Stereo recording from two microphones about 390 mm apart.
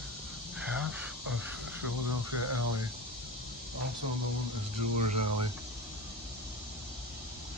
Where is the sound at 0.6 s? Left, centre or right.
Centre.